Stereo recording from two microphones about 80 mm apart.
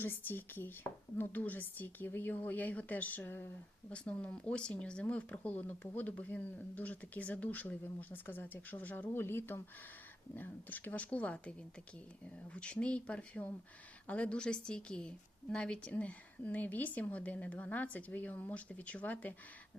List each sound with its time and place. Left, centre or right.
0.0 s speech: left
3.9 s a woman's voice: centre